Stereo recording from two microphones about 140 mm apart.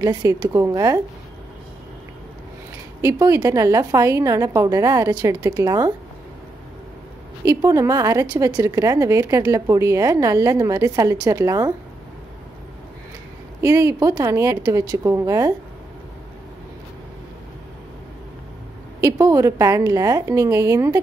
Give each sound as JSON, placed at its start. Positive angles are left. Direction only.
{"t": 0.0, "sound": "a woman's voice", "side_deg": -25}
{"t": 3.0, "sound": "a woman's voice", "side_deg": -25}
{"t": 7.4, "sound": "a woman's voice", "side_deg": -20}
{"t": 13.6, "sound": "a woman's voice", "side_deg": -20}
{"t": 18.9, "sound": "a woman's voice", "side_deg": -20}